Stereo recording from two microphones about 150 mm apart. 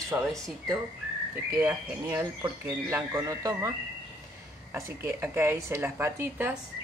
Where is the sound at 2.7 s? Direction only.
15° right (ahead or behind).